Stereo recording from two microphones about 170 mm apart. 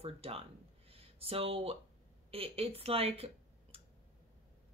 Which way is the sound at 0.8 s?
35° right (ahead or behind).